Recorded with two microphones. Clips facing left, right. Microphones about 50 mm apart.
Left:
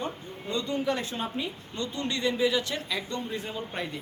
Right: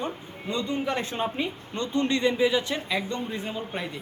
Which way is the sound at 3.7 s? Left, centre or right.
Centre.